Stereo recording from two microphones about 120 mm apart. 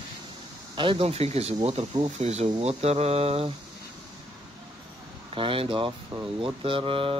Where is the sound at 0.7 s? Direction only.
50° right (ahead or behind).